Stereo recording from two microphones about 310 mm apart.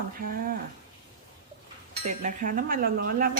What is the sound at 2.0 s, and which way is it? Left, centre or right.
A woman's voice, right.